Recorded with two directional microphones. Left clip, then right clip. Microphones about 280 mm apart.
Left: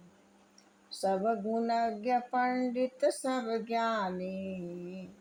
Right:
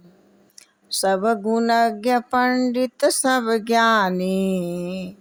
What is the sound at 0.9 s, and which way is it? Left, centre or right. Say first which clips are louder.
Speech: right 11 dB; right.